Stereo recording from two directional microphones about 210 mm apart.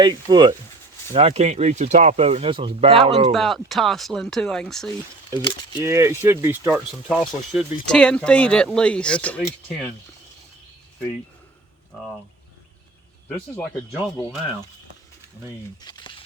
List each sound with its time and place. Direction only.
0.0 s speech: 20° right (ahead or behind)
1.1 s speech: 30° right (ahead or behind)
3.3 s speech: centre (ahead or behind)
5.4 s speech: 20° left (ahead or behind)
5.8 s speech: 15° right (ahead or behind); by 9.5 s 5° left (ahead or behind)
15.8 s speech: 20° left (ahead or behind)